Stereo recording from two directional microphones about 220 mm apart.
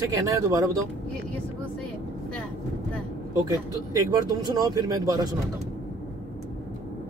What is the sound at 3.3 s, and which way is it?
Speech, 15° right (ahead or behind).